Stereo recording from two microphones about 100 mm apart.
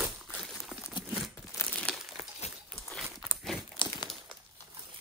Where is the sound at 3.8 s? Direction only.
55° left (ahead or behind).